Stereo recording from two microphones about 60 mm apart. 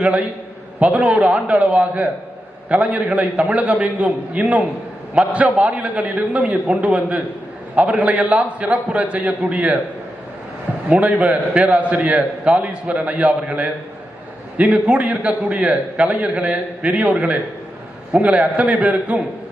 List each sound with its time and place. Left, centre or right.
0.0 s a man's voice: right
5.1 s a man's voice: centre
5.4 s a man's voice: right
10.8 s a man's voice: right